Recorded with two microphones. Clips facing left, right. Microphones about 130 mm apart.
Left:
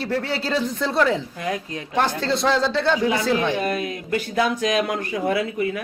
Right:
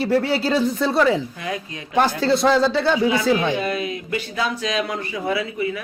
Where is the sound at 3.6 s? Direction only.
50° left (ahead or behind).